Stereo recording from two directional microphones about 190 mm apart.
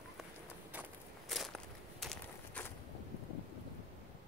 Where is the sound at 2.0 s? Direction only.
5° left (ahead or behind).